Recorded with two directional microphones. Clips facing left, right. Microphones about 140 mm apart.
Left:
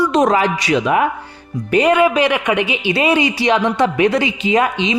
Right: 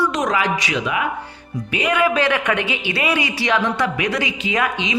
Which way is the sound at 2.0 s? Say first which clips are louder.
Left 4 dB; 15° left (ahead or behind).